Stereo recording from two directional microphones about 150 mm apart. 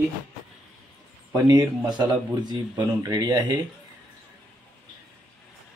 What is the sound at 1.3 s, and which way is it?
Speech, 25° right (ahead or behind).